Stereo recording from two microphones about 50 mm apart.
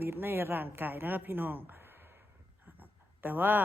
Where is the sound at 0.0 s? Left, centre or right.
Right.